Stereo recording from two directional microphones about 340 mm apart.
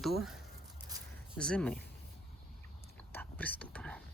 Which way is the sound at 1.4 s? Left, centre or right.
Centre.